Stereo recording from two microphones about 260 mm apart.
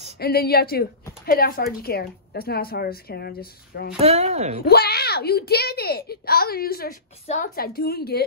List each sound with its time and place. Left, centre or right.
0.2 s a child's voice: left
4.0 s speech: right
4.6 s a child's voice: left